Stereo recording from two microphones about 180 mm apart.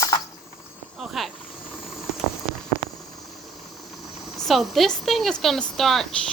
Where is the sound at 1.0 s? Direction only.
Centre (ahead or behind).